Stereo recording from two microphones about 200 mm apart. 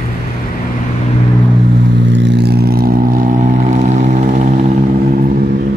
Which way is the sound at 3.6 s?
35° right (ahead or behind).